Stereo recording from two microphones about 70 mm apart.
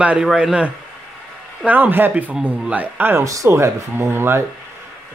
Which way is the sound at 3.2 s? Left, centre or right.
Right.